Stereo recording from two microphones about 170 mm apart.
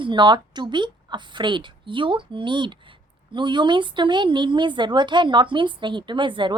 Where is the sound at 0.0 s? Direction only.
25° right (ahead or behind).